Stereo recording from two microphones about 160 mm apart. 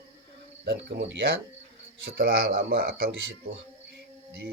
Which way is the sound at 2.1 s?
70° right (ahead or behind).